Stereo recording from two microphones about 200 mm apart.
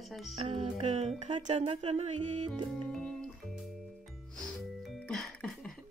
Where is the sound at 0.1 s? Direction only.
Centre (ahead or behind).